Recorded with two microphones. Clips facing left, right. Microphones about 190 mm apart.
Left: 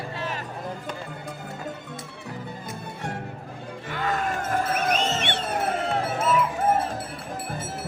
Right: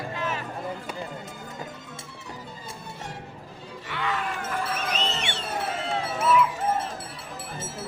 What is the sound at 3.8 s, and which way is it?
Music, 45° left (ahead or behind).